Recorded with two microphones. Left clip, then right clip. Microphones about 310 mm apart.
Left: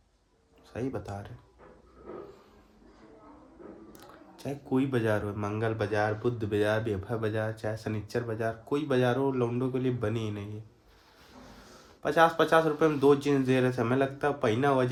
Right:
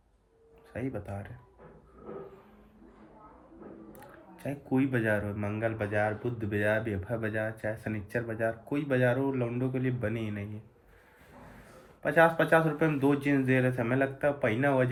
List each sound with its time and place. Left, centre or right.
0.7 s speech: centre
4.4 s speech: centre
12.0 s speech: centre